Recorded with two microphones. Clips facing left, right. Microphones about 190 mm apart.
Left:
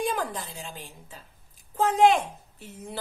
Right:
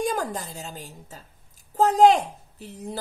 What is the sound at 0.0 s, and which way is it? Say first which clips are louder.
A woman's voice: right 2 dB; 45° right (ahead or behind).